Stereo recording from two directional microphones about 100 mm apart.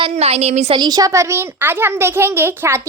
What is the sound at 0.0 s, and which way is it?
Speech, 90° right.